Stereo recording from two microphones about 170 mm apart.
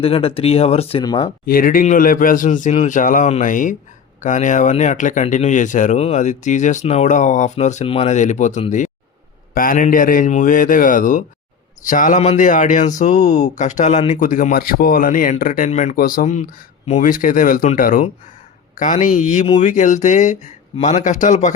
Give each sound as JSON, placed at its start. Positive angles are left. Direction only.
{"t": 0.0, "sound": "speech", "side_deg": 35}
{"t": 1.5, "sound": "speech", "side_deg": 55}